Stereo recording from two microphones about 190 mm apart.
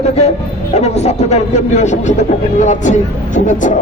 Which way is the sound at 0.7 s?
35° left (ahead or behind).